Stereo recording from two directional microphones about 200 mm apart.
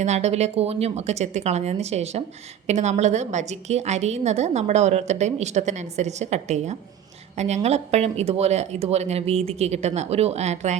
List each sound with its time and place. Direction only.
0.0 s a woman's voice: 35° right (ahead or behind)